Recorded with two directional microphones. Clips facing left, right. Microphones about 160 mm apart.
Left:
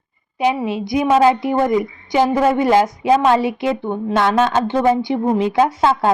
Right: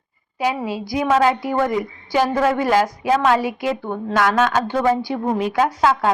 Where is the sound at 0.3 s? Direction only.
20° left (ahead or behind).